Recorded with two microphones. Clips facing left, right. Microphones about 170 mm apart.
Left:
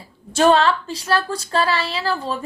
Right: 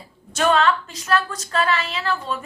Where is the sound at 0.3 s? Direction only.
30° left (ahead or behind).